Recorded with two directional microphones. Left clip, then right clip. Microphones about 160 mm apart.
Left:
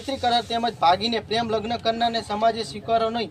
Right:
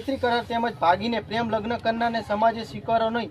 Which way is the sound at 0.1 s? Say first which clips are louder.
Left 2 dB; 15° right (ahead or behind).